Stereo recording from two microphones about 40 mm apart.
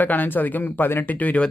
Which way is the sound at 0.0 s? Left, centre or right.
Left.